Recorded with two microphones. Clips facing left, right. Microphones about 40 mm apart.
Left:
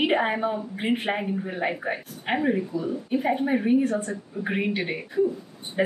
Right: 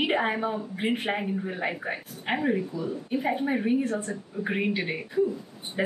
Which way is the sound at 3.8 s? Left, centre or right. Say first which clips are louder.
Left 4 dB; centre.